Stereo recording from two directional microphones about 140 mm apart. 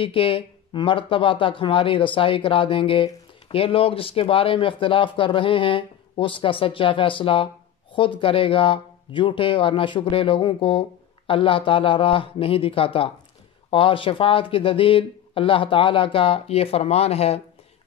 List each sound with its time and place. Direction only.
0.0 s speech: 40° left (ahead or behind)